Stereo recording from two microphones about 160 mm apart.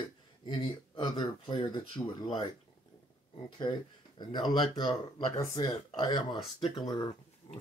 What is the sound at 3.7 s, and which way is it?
Speech, 30° left (ahead or behind).